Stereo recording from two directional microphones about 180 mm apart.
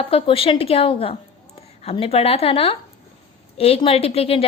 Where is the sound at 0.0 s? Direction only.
30° left (ahead or behind).